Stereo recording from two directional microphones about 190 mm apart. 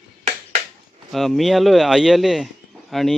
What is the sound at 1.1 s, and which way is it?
Speech, centre (ahead or behind).